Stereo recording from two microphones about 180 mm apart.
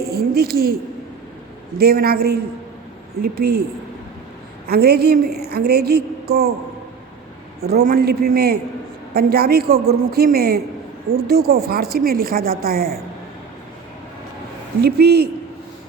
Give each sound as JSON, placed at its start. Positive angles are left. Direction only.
{"t": 0.1, "sound": "a woman's voice", "side_deg": -60}
{"t": 1.8, "sound": "a woman's voice", "side_deg": -60}
{"t": 4.6, "sound": "a woman's voice", "side_deg": -60}
{"t": 7.6, "sound": "a woman's voice", "side_deg": -60}
{"t": 14.8, "sound": "a woman's voice", "side_deg": -65}